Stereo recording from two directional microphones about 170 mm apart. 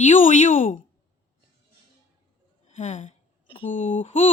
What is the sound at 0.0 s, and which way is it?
Speech, 50° left (ahead or behind).